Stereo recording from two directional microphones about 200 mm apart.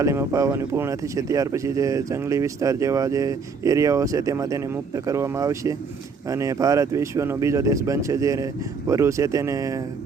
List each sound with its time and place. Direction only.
0.0 s speech: 15° right (ahead or behind)